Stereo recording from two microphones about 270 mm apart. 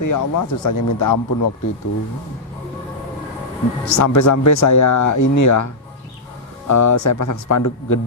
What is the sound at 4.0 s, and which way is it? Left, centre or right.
A man's voice, left.